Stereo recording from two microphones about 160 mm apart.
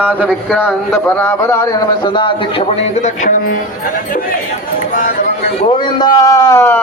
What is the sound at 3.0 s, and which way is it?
Music, 50° left (ahead or behind).